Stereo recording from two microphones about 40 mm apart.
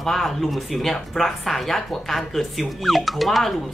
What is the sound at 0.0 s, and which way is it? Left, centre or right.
Speech, centre.